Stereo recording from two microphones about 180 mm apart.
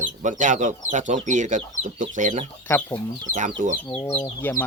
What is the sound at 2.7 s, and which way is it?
Speech, 15° left (ahead or behind).